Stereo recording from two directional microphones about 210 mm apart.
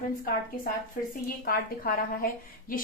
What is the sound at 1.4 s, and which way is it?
Speech, 45° left (ahead or behind).